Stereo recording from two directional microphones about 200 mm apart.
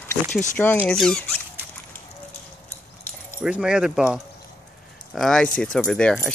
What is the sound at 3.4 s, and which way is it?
Speech, 5° right (ahead or behind).